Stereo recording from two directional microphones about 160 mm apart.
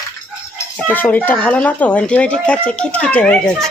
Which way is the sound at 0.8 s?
10° left (ahead or behind).